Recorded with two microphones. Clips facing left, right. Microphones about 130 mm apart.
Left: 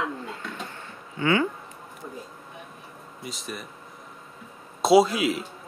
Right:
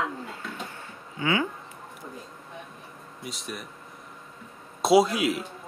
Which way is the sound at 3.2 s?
Centre (ahead or behind).